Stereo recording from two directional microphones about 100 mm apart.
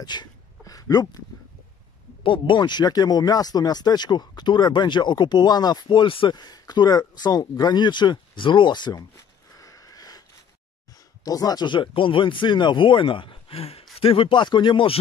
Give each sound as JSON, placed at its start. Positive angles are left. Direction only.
{"t": 0.0, "sound": "a sound", "side_deg": 45}
{"t": 2.2, "sound": "speech", "side_deg": 55}
{"t": 6.3, "sound": "speech", "side_deg": 45}
{"t": 9.1, "sound": "sniff", "side_deg": 35}
{"t": 11.2, "sound": "speech", "side_deg": 40}